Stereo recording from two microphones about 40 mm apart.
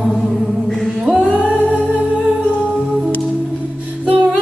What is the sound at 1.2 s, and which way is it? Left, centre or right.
Music, right.